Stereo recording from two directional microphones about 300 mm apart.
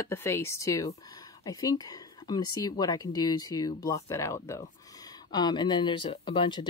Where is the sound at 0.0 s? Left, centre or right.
Centre.